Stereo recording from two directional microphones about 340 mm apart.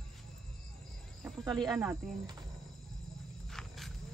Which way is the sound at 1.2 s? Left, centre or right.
Centre.